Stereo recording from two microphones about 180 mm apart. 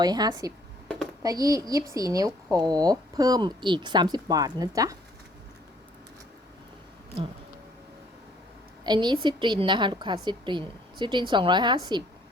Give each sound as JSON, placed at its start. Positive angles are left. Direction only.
{"t": 0.0, "sound": "speech", "side_deg": -20}
{"t": 8.8, "sound": "a woman's voice", "side_deg": -25}